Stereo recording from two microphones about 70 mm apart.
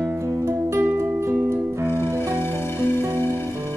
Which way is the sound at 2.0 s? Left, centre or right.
Right.